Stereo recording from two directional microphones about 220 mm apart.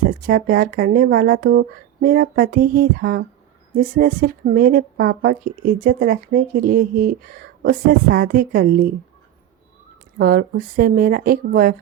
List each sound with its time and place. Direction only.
0.0 s speech: 40° right (ahead or behind)
10.2 s speech: 45° right (ahead or behind)